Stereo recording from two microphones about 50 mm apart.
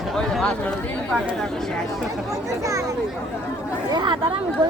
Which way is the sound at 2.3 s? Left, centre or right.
Right.